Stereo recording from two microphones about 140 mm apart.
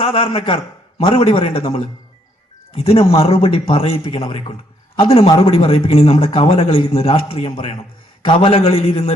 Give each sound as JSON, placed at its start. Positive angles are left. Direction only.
{"t": 0.0, "sound": "a man's voice", "side_deg": 40}